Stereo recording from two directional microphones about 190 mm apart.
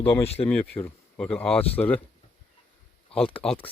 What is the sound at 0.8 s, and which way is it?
Speech, 10° left (ahead or behind).